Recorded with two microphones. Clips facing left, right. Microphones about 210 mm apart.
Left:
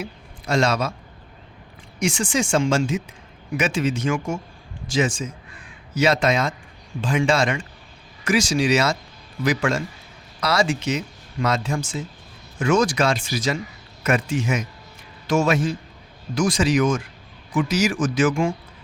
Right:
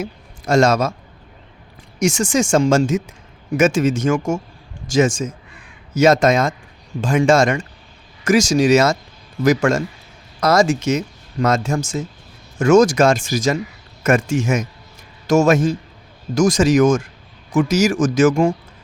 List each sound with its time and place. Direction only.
0.0 s a man's voice: 45° right (ahead or behind)
2.0 s speech: 45° right (ahead or behind)